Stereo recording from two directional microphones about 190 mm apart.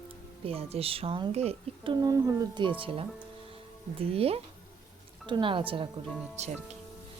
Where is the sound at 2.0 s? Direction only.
20° right (ahead or behind); by 6.5 s 35° right (ahead or behind).